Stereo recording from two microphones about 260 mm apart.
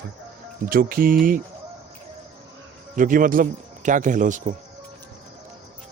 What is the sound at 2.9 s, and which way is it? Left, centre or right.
A man's voice, right.